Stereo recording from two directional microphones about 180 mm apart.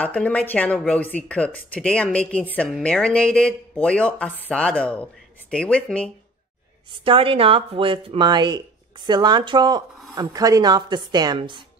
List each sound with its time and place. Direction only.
0.0 s speech: 5° left (ahead or behind)
7.1 s speech: 30° right (ahead or behind)